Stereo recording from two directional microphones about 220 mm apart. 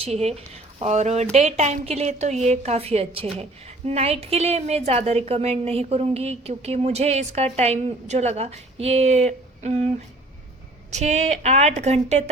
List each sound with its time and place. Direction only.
0.0 s a woman's voice: 30° right (ahead or behind)
10.9 s speech: 30° right (ahead or behind)